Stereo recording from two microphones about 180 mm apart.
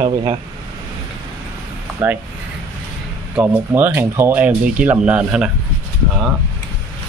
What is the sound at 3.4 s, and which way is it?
Speech, 10° right (ahead or behind).